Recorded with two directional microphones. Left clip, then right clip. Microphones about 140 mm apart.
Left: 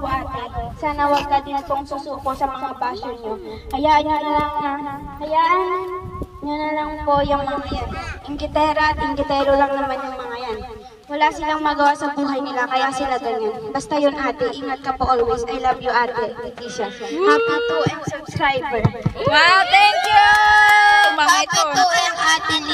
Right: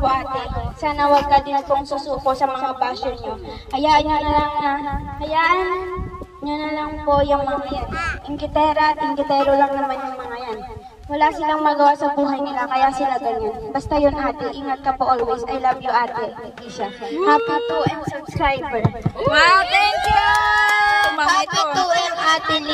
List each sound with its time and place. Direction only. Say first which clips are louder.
0.8 s a woman's voice: right 3 dB; 35° right (ahead or behind)
11.1 s a woman's voice: right 1 dB; 20° right (ahead or behind)
17.6 s a woman's voice: left 1 dB; 5° left (ahead or behind)
19.3 s a sound: left 1 dB; 15° left (ahead or behind)
21.7 s a woman's voice: left 2 dB; 25° right (ahead or behind)